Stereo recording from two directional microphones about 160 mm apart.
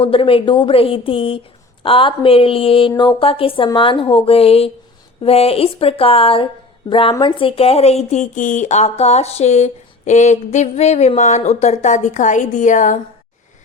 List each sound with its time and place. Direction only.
0.0 s a woman's voice: 35° left (ahead or behind); by 13.0 s 50° left (ahead or behind)